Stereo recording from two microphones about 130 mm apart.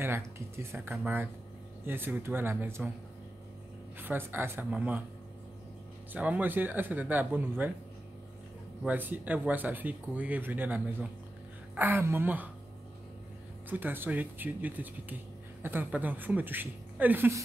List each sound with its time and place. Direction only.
0.0 s speech: 20° right (ahead or behind)
4.0 s speech: 15° right (ahead or behind)
6.1 s speech: 10° right (ahead or behind)
8.8 s speech: 15° right (ahead or behind)
13.7 s speech: 15° right (ahead or behind)